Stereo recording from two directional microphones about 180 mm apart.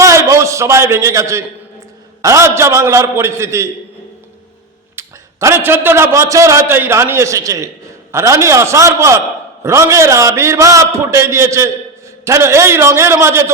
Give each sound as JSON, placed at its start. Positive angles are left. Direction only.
{"t": 0.0, "sound": "a sound", "side_deg": -15}
{"t": 2.2, "sound": "a man's voice", "side_deg": -15}
{"t": 4.9, "sound": "a man's voice", "side_deg": -15}